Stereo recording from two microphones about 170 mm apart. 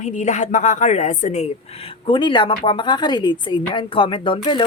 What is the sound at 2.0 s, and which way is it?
Speech, 30° left (ahead or behind).